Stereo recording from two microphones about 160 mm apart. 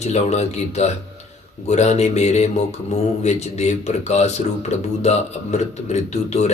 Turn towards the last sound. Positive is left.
turn(degrees=45)  # may be behind; listen again after turning